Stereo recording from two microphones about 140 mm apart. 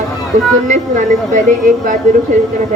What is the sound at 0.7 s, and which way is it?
Speech, 60° right (ahead or behind).